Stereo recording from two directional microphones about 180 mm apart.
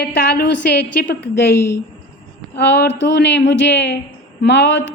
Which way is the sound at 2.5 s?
70° left (ahead or behind).